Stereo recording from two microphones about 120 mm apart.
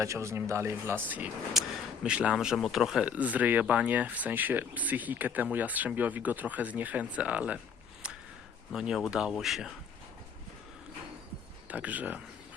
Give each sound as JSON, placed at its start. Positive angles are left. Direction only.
{"t": 0.0, "sound": "speech", "side_deg": -25}
{"t": 1.6, "sound": "speech", "side_deg": 0}
{"t": 8.0, "sound": "a sound", "side_deg": -10}
{"t": 8.7, "sound": "speech", "side_deg": -5}
{"t": 11.7, "sound": "speech", "side_deg": -10}